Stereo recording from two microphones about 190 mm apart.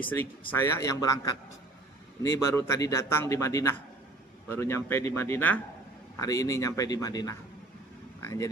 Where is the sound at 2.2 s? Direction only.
15° left (ahead or behind).